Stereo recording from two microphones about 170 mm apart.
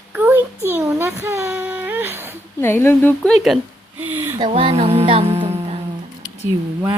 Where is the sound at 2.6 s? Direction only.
15° left (ahead or behind).